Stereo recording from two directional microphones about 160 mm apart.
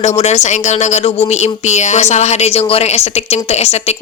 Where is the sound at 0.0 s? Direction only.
45° left (ahead or behind).